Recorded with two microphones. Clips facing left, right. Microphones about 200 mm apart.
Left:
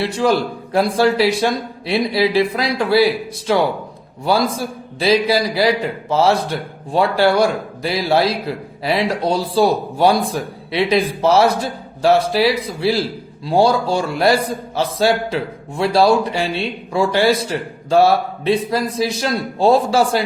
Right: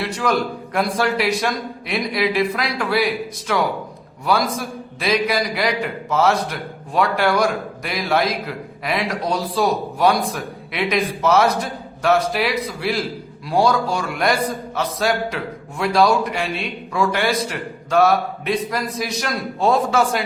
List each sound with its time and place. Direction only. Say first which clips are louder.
0.0 s a man's voice: left 4 dB; 30° left (ahead or behind)